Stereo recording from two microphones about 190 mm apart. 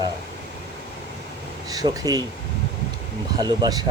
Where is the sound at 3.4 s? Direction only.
20° right (ahead or behind).